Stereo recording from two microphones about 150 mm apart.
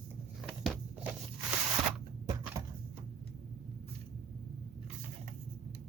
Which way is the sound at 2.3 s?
20° right (ahead or behind).